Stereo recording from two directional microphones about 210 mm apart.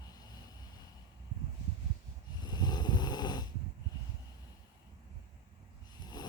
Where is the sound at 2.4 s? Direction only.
20° left (ahead or behind).